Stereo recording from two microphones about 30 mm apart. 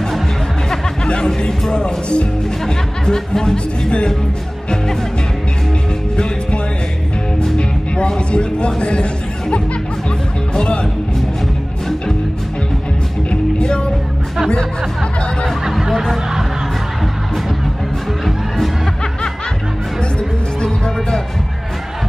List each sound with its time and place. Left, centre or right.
1.4 s music: left
3.1 s speech: centre
3.5 s music: left
7.5 s music: left
10.6 s music: left
15.9 s speech: centre